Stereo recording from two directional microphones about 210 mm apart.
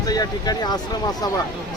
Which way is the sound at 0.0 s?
20° left (ahead or behind).